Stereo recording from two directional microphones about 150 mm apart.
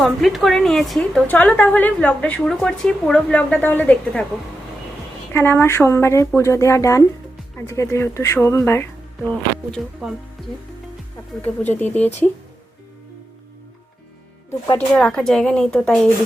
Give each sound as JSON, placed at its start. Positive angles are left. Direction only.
{"t": 0.0, "sound": "a woman's voice", "side_deg": 0}
{"t": 5.3, "sound": "a woman's voice", "side_deg": 15}
{"t": 9.7, "sound": "speech", "side_deg": -5}
{"t": 11.4, "sound": "a woman's voice", "side_deg": 10}
{"t": 14.8, "sound": "a woman's voice", "side_deg": 5}